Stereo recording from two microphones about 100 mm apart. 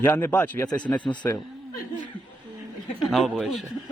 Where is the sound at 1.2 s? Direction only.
30° left (ahead or behind).